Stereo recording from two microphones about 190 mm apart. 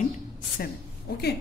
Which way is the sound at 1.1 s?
55° left (ahead or behind).